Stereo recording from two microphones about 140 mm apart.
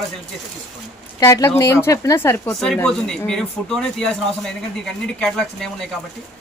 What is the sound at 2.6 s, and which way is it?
Speech, 5° left (ahead or behind).